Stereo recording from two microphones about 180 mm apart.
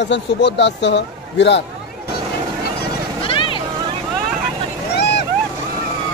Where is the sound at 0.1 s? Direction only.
75° left (ahead or behind).